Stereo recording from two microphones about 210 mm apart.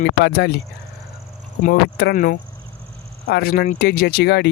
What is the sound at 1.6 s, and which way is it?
Speech, 40° left (ahead or behind).